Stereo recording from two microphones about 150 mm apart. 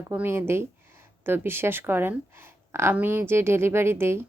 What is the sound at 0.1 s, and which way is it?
A woman's voice, 15° right (ahead or behind).